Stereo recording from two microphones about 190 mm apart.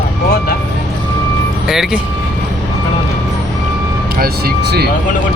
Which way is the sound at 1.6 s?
Centre (ahead or behind).